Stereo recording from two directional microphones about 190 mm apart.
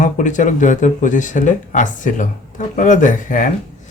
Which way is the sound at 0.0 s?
40° left (ahead or behind).